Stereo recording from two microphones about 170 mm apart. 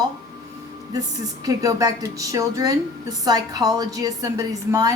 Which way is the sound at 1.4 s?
20° right (ahead or behind).